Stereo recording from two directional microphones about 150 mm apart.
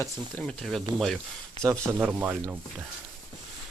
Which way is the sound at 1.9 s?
10° right (ahead or behind).